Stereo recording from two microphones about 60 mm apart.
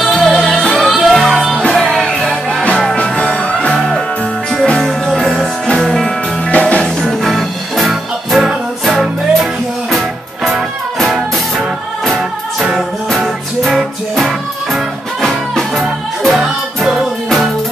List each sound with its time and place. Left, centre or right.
0.0 s music: centre
6.5 s music: left
6.8 s music: centre